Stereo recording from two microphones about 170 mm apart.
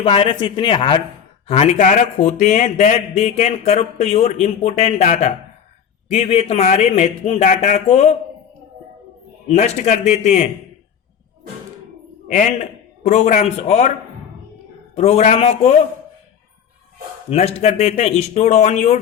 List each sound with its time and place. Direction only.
0.0 s speech: 30° left (ahead or behind)
1.5 s a man's voice: 40° left (ahead or behind)
9.5 s a man's voice: 40° left (ahead or behind)
12.3 s a man's voice: 50° left (ahead or behind)
14.9 s a man's voice: 40° left (ahead or behind)
17.2 s a man's voice: 40° left (ahead or behind)